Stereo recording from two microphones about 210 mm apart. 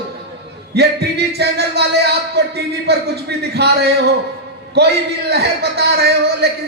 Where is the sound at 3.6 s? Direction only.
50° right (ahead or behind).